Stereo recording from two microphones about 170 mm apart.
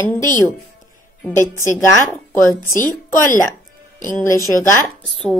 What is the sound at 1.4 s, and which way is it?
A woman's voice, 15° left (ahead or behind).